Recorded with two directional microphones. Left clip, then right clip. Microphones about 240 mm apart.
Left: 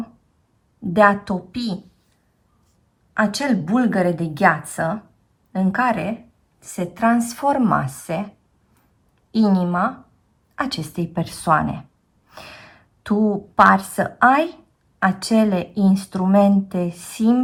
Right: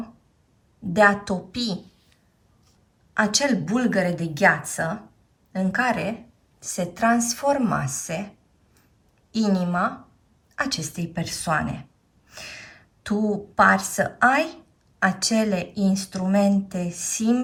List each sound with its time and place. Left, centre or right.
0.9 s a woman's voice: centre
3.2 s a woman's voice: centre
9.3 s a woman's voice: centre